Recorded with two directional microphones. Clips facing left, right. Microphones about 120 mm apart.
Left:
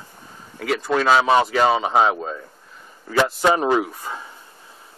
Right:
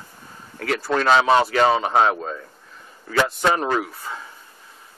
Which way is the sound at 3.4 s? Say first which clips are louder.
Left 3 dB; 15° left (ahead or behind).